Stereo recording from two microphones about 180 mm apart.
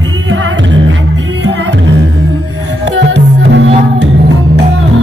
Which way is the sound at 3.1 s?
80° right.